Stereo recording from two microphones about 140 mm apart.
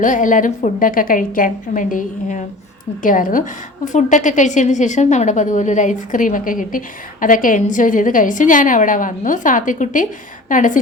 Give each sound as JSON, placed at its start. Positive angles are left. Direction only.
{"t": 0.0, "sound": "a woman's voice", "side_deg": 65}
{"t": 3.8, "sound": "a woman's voice", "side_deg": 65}